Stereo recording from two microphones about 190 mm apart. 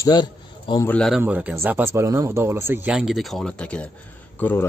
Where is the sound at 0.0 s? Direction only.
20° left (ahead or behind).